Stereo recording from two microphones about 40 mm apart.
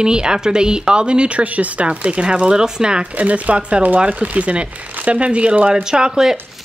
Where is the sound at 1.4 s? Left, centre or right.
Right.